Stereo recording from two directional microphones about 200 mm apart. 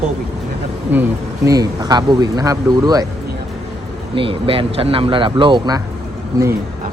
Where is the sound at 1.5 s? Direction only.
20° right (ahead or behind).